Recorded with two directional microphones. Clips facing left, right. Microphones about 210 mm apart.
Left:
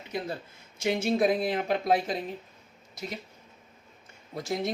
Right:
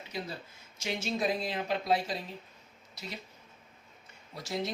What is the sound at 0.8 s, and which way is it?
Speech, 55° left (ahead or behind).